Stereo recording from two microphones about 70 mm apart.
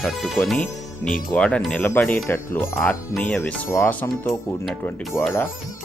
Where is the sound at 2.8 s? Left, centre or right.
Centre.